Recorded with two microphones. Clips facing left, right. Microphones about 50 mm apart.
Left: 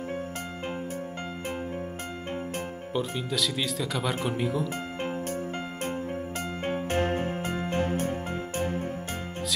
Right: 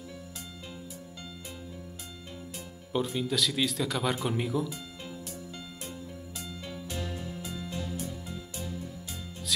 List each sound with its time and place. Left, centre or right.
2.9 s speech: centre
6.6 s music: left